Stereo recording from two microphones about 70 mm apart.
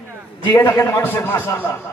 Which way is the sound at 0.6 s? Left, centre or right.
Left.